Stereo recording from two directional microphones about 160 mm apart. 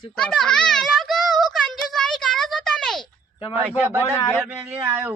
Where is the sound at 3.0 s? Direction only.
35° left (ahead or behind).